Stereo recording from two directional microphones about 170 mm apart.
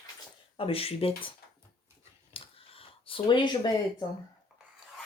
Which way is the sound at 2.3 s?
35° left (ahead or behind).